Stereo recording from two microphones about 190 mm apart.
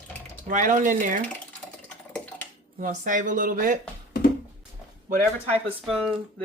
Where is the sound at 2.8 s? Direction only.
45° right (ahead or behind).